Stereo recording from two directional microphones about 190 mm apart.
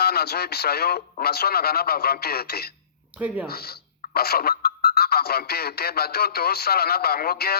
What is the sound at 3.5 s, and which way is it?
Speech, 55° left (ahead or behind).